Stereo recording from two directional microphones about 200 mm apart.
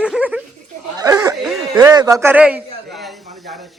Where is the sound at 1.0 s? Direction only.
15° right (ahead or behind).